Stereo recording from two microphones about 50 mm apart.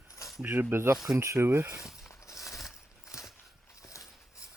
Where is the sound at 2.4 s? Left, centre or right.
Left.